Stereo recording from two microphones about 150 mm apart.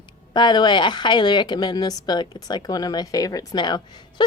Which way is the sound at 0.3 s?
30° left (ahead or behind).